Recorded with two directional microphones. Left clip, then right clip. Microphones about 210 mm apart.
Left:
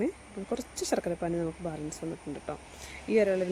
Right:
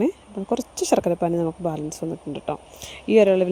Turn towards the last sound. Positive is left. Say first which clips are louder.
# right 10 dB
turn(degrees=-35)  # may be behind; listen again after turning